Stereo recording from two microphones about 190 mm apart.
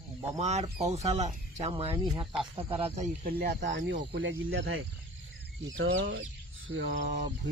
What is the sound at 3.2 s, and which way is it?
Speech, 55° right (ahead or behind).